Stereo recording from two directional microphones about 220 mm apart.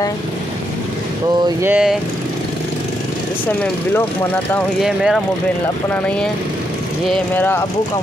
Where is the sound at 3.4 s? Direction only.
10° left (ahead or behind).